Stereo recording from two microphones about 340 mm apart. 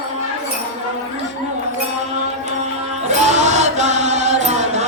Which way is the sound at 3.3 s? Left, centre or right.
Centre.